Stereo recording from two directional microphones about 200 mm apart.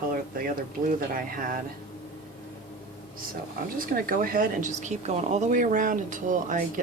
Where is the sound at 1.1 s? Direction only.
45° right (ahead or behind).